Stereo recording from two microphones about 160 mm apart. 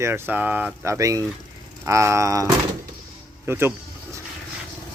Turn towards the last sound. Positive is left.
turn(degrees=-15)  # may be behind; listen again after turning